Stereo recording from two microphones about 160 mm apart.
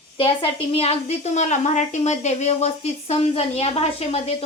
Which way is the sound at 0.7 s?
40° left (ahead or behind).